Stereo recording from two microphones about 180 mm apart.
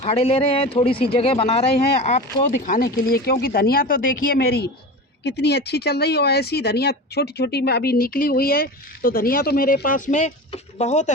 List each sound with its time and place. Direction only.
0.0 s speech: 35° left (ahead or behind)